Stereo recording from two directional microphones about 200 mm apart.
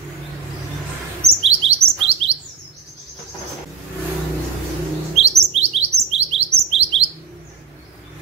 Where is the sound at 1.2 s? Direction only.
30° right (ahead or behind).